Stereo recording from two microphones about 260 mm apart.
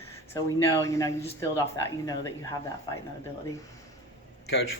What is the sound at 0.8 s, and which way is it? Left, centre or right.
Speech, centre.